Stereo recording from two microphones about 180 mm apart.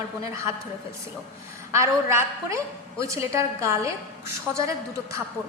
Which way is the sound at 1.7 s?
15° right (ahead or behind).